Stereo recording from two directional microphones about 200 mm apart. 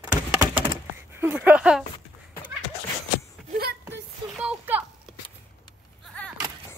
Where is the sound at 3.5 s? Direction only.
50° right (ahead or behind).